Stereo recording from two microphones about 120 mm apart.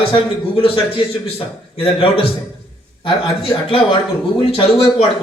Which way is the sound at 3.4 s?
55° left (ahead or behind).